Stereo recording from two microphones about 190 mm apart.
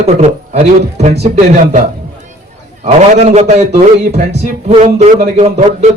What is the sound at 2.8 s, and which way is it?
A man's voice, 35° right (ahead or behind).